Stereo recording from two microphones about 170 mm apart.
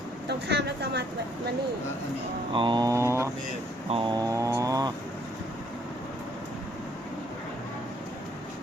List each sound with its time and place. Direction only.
0.3 s speech: 75° right (ahead or behind)
2.5 s mantra: 30° right (ahead or behind)
3.8 s mantra: 30° right (ahead or behind)